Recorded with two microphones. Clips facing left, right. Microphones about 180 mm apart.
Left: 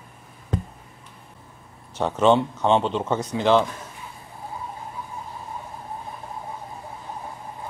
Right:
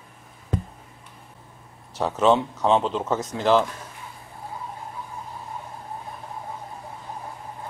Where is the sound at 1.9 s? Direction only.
Centre (ahead or behind).